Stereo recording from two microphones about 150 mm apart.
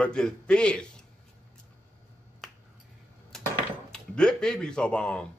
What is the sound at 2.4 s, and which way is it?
Finger snapping, centre (ahead or behind).